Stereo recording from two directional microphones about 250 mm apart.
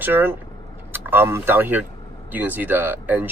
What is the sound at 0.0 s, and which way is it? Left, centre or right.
Speech, centre.